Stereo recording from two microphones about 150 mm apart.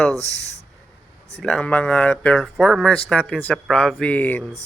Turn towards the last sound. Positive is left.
turn(degrees=10)  # may be behind; listen again after turning